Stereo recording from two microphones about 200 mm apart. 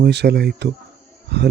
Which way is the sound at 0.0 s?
55° right (ahead or behind).